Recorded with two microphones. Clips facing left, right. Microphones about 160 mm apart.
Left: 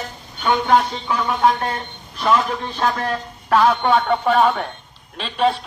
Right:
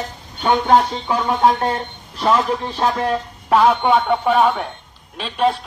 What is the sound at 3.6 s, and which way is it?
Music, 15° right (ahead or behind).